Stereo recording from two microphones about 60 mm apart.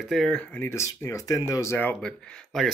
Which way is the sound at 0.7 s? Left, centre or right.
Left.